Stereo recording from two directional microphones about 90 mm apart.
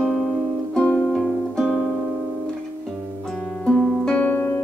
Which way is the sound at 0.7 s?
10° left (ahead or behind).